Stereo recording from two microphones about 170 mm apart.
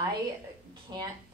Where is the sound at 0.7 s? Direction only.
25° right (ahead or behind).